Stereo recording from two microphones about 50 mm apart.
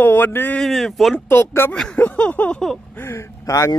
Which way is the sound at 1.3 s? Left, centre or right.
Left.